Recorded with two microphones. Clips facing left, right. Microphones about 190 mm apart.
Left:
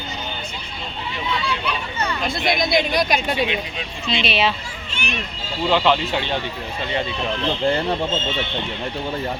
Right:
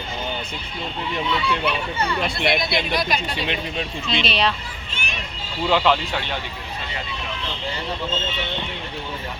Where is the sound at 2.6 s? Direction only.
45° left (ahead or behind).